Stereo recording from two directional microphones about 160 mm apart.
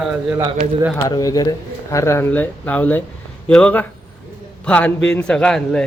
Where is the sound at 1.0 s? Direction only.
20° left (ahead or behind).